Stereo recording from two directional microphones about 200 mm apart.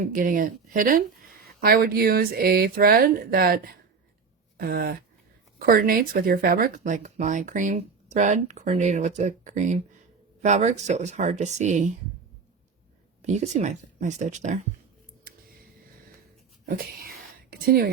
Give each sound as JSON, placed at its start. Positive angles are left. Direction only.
{"t": 0.0, "sound": "speech", "side_deg": -45}
{"t": 13.2, "sound": "speech", "side_deg": -35}
{"t": 16.6, "sound": "speech", "side_deg": -45}